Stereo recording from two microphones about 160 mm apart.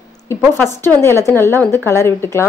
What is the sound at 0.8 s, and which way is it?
A woman's voice, 15° left (ahead or behind).